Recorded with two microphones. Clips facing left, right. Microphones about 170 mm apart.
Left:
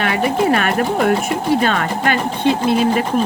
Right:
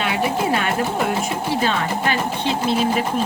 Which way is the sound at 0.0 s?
55° left (ahead or behind).